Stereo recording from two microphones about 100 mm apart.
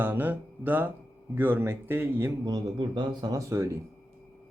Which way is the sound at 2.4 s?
45° right (ahead or behind).